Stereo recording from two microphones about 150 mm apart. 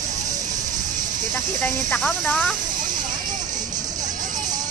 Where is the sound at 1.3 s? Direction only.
15° left (ahead or behind).